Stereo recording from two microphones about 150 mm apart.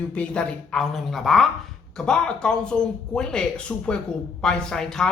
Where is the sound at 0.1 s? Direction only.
5° left (ahead or behind).